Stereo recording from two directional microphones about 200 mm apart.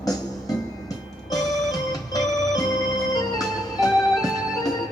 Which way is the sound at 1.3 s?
20° left (ahead or behind).